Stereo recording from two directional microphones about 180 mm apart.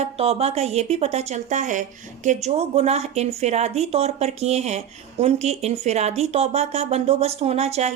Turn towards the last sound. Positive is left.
turn(degrees=-35)  # may be behind; listen again after turning